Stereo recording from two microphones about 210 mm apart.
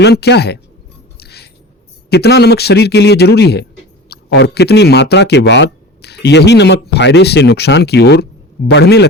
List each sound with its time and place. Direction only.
0.0 s speech: 50° left (ahead or behind)
1.2 s a sound: 50° left (ahead or behind)
2.0 s speech: 50° left (ahead or behind)